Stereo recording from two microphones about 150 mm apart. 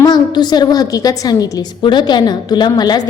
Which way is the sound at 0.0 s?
30° left (ahead or behind).